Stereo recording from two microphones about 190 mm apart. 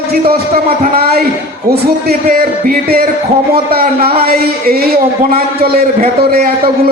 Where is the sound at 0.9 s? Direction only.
55° right (ahead or behind).